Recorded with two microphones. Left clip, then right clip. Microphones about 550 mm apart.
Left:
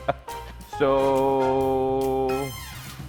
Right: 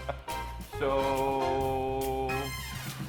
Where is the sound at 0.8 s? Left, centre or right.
Left.